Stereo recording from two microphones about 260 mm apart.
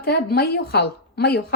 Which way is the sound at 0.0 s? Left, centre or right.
Left.